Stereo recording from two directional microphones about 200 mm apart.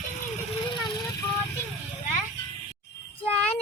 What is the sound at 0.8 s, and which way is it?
Vehicle, 20° left (ahead or behind).